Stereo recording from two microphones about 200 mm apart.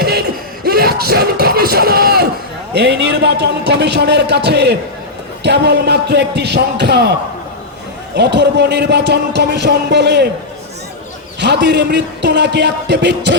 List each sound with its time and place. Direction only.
0.0 s music: 50° right (ahead or behind)
2.7 s speech: 60° right (ahead or behind)
11.3 s speech: 60° right (ahead or behind)